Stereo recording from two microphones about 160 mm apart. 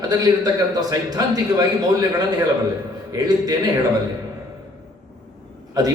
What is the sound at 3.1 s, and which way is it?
Speech, 20° right (ahead or behind).